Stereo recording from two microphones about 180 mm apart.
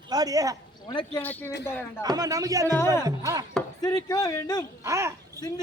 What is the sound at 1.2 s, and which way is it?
Speech, 10° left (ahead or behind).